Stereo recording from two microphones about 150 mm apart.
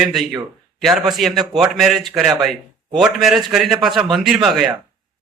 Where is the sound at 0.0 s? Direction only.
Centre (ahead or behind).